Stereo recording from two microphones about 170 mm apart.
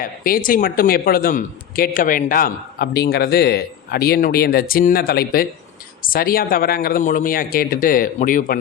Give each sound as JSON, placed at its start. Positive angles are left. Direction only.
{"t": 0.0, "sound": "speech", "side_deg": 55}